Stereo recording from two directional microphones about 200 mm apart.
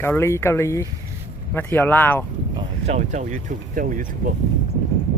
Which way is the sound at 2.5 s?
35° right (ahead or behind).